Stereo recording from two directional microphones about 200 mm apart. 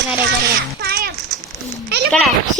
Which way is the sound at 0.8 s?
50° right (ahead or behind).